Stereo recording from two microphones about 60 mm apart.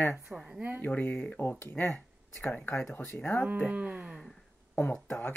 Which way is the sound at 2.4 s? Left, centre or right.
Left.